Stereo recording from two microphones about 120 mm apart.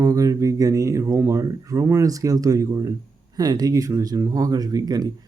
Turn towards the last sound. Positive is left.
turn(degrees=-35)  # may be behind; listen again after turning